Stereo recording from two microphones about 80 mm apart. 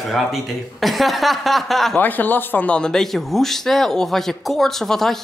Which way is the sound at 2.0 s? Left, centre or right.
Left.